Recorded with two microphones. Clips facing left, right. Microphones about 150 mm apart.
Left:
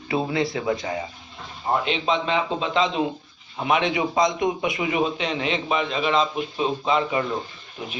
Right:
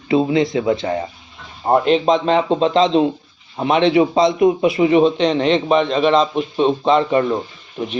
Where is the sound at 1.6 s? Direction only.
45° right (ahead or behind).